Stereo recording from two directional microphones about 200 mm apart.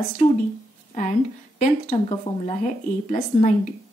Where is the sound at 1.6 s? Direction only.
35° left (ahead or behind).